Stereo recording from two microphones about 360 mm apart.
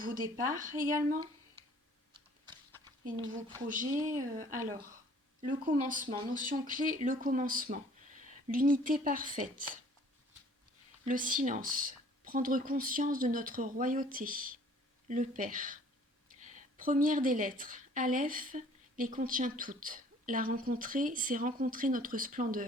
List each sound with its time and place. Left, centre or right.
0.0 s a woman's voice: right
2.8 s a woman's voice: centre
4.1 s speech: centre
5.4 s a woman's voice: right
11.0 s a woman's voice: right